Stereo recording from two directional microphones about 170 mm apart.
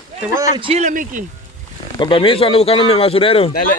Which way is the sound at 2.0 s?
30° left (ahead or behind).